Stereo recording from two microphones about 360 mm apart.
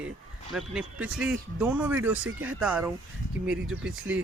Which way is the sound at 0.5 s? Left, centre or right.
Centre.